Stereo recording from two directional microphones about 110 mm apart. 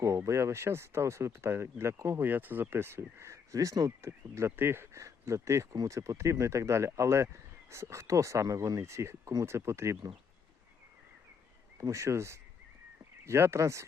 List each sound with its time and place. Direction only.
0.0 s speech: 25° right (ahead or behind)
11.8 s speech: 30° right (ahead or behind)